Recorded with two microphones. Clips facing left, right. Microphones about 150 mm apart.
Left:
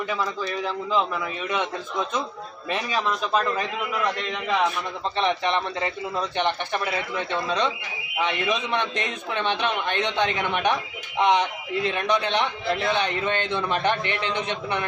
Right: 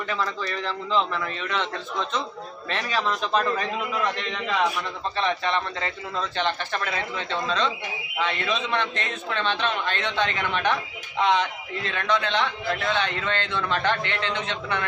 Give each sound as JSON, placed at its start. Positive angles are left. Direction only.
{"t": 0.1, "sound": "a man's voice", "side_deg": 10}
{"t": 5.1, "sound": "a man's voice", "side_deg": 15}